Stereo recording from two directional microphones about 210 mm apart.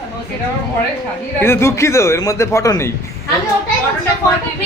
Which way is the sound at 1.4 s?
10° left (ahead or behind).